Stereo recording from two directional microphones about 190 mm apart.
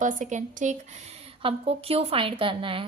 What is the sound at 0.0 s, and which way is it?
A woman's voice, 40° right (ahead or behind).